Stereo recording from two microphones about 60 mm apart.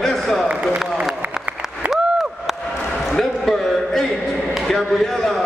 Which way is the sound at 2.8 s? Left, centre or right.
Centre.